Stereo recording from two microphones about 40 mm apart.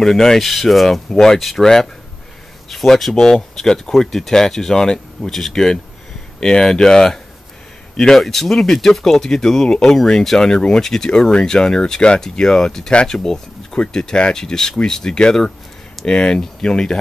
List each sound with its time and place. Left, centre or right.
0.0 s speech: centre